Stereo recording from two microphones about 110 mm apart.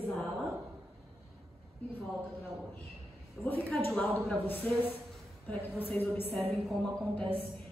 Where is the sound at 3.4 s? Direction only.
15° left (ahead or behind).